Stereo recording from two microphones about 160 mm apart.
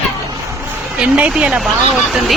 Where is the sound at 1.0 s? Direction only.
5° right (ahead or behind).